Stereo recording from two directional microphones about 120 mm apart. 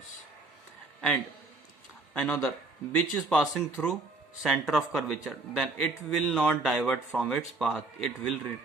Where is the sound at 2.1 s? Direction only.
10° left (ahead or behind).